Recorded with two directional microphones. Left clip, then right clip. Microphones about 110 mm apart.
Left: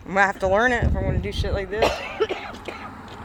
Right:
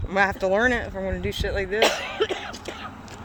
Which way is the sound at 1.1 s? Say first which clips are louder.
Even; 60° right (ahead or behind).